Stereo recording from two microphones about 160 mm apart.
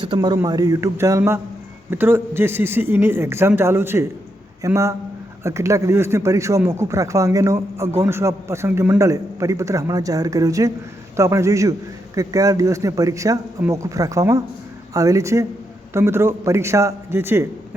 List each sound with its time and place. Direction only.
0.0 s a man's voice: 25° right (ahead or behind)